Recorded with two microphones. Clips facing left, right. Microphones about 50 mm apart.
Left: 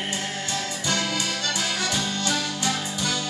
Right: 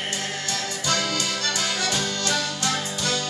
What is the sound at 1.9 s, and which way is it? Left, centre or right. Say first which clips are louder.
Music: right 1 dB; centre.